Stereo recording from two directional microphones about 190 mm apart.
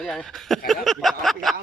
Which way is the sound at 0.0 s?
5° left (ahead or behind).